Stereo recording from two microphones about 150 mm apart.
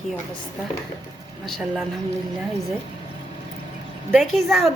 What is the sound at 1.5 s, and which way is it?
Speech, centre (ahead or behind).